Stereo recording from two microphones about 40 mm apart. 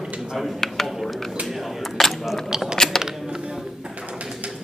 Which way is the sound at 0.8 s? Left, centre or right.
Centre.